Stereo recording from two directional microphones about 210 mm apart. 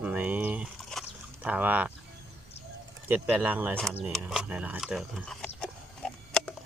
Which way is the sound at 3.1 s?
10° right (ahead or behind).